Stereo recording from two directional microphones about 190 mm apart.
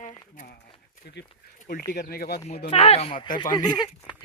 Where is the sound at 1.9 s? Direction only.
55° left (ahead or behind).